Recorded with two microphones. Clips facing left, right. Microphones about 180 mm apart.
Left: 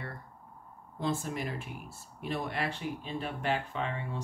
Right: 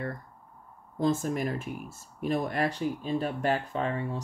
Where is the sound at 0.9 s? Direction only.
45° right (ahead or behind).